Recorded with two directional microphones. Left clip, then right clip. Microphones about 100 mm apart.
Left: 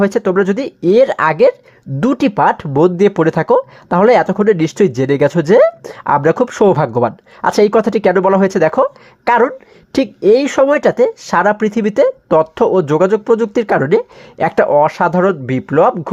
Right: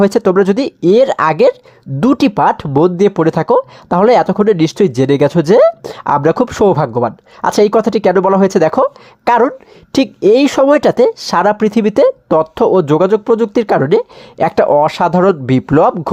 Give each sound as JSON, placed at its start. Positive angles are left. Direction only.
{"t": 0.0, "sound": "a woman's voice", "side_deg": -30}
{"t": 1.3, "sound": "a woman's voice", "side_deg": -30}
{"t": 6.7, "sound": "speech", "side_deg": -5}
{"t": 7.5, "sound": "a woman's voice", "side_deg": -15}
{"t": 14.7, "sound": "speech", "side_deg": -30}